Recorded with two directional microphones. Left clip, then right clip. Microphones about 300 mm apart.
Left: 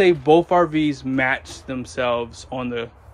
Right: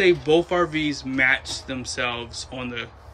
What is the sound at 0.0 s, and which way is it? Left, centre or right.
Speech, centre.